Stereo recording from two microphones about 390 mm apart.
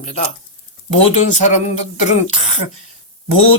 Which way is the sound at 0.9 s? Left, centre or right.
Right.